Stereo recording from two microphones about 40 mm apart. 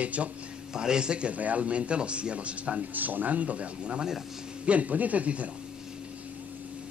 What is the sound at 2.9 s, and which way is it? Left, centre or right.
Speech, right.